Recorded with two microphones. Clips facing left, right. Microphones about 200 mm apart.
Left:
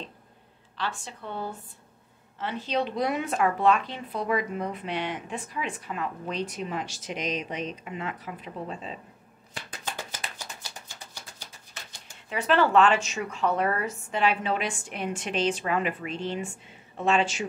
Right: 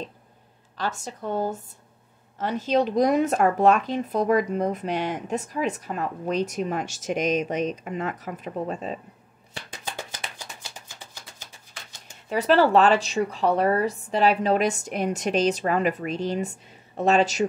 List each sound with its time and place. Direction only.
0.7 s speech: 40° right (ahead or behind)
12.3 s a woman's voice: 35° right (ahead or behind)